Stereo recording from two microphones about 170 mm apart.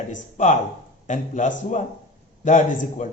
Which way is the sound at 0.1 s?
45° left (ahead or behind).